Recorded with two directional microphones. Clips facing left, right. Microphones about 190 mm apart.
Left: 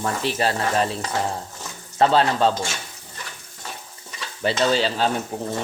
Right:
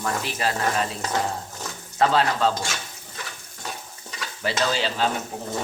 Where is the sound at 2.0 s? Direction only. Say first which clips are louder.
Left 3 dB; 30° left (ahead or behind).